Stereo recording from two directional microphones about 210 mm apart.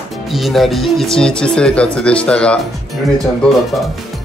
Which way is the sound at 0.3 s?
Centre (ahead or behind).